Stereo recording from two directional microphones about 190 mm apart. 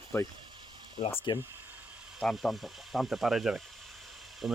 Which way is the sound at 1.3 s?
15° right (ahead or behind).